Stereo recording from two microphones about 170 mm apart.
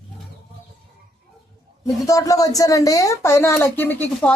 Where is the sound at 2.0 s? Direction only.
20° left (ahead or behind).